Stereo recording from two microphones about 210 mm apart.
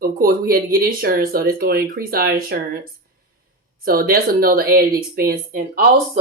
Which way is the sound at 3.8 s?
45° right (ahead or behind).